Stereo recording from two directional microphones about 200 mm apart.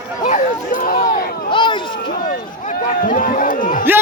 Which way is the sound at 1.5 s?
25° left (ahead or behind).